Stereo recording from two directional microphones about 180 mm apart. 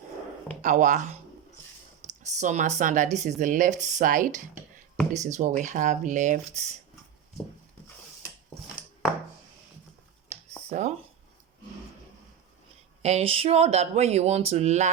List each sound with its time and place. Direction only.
0.6 s speech: 45° right (ahead or behind)
10.7 s speech: 40° right (ahead or behind)
13.0 s speech: 35° right (ahead or behind)